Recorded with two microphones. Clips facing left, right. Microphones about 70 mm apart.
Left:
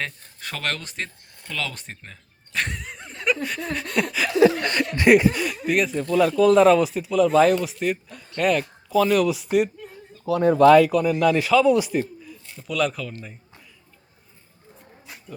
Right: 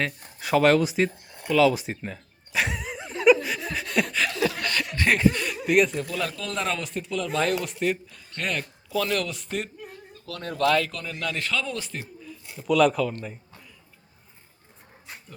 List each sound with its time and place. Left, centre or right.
0.0 s a sound: centre
3.4 s chuckle: centre
4.3 s chuckle: left
4.9 s chuckle: centre
5.5 s a man's voice: centre